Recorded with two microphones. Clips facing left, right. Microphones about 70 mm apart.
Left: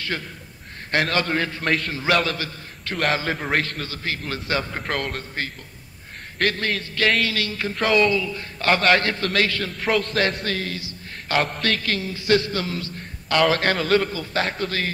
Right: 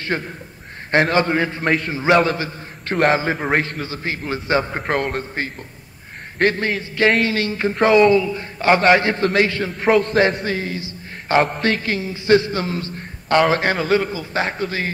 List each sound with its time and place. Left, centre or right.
0.0 s a man's voice: right
9.8 s a man's voice: centre
10.4 s a man's voice: right